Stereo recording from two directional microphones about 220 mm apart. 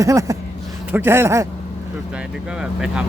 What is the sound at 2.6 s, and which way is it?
Speech, 5° right (ahead or behind).